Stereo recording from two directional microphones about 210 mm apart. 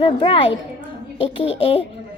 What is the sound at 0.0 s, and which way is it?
Speech, 25° left (ahead or behind).